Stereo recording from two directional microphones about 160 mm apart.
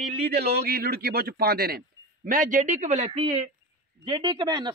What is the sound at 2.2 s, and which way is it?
A woman's voice, 55° right (ahead or behind).